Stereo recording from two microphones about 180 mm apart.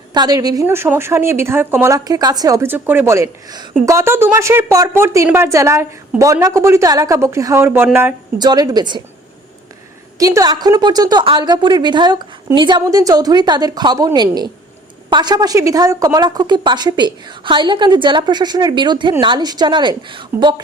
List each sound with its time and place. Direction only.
0.1 s a woman's voice: 20° right (ahead or behind)
10.2 s a woman's voice: 20° right (ahead or behind)